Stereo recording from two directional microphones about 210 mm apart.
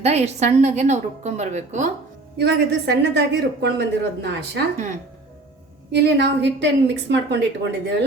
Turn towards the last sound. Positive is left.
turn(degrees=-55)  # may be behind; listen again after turning